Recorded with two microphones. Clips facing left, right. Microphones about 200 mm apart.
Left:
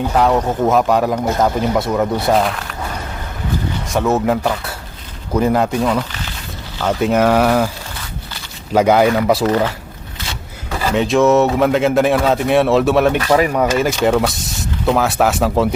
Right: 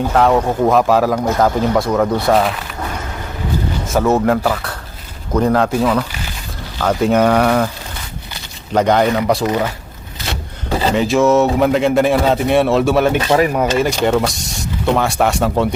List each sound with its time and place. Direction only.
0.0 s a man's voice: centre (ahead or behind)
3.8 s a man's voice: centre (ahead or behind)
8.7 s speech: 5° left (ahead or behind)
10.7 s a sound: 25° right (ahead or behind)
10.9 s a man's voice: centre (ahead or behind)